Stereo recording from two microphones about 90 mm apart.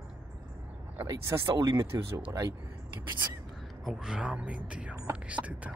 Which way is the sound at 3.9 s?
5° right (ahead or behind).